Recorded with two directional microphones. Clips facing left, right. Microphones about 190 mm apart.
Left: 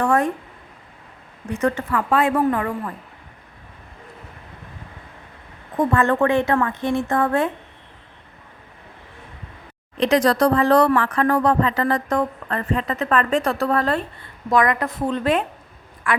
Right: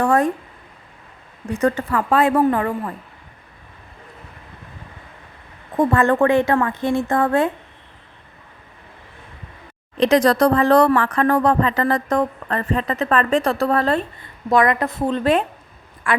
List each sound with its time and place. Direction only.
0.0 s a sound: 35° right (ahead or behind)
1.5 s speech: 35° right (ahead or behind)
5.7 s speech: 35° right (ahead or behind)
10.0 s a woman's voice: 40° right (ahead or behind)